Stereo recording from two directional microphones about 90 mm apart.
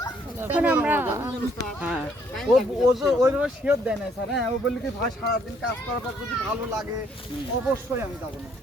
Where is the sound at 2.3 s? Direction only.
Centre (ahead or behind).